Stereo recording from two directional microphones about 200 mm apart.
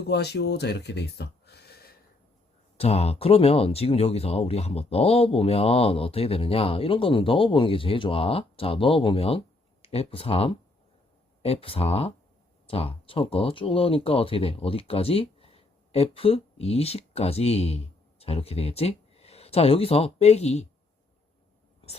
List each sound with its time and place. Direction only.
0.1 s speech: 55° left (ahead or behind)
2.7 s speech: 30° left (ahead or behind)